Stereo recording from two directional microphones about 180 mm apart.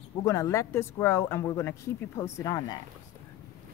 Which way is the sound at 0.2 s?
20° left (ahead or behind).